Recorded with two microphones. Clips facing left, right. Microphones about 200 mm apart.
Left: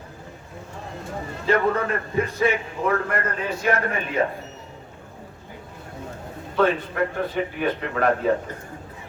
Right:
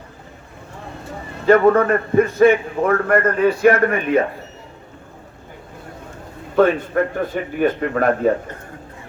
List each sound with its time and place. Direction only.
1.5 s a man's voice: 55° right (ahead or behind)
6.6 s a man's voice: 50° right (ahead or behind)